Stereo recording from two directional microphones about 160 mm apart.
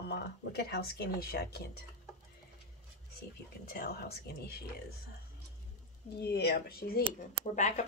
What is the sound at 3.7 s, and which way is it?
Speech, 75° left (ahead or behind).